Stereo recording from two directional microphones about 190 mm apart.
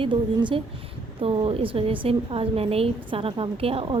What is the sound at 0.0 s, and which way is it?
A woman's voice, 25° right (ahead or behind).